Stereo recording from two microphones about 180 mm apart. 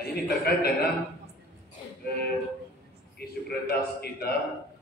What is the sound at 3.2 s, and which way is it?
A man's voice, 60° left (ahead or behind).